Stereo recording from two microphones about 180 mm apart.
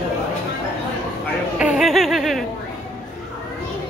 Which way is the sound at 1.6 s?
5° right (ahead or behind).